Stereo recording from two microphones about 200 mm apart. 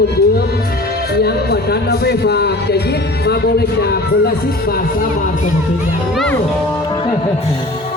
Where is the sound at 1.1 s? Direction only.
55° left (ahead or behind).